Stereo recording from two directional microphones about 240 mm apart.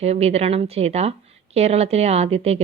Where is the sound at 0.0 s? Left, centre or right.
Right.